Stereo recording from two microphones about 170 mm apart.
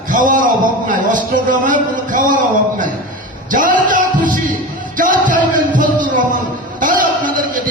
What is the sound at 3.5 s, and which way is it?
Music, 50° right (ahead or behind).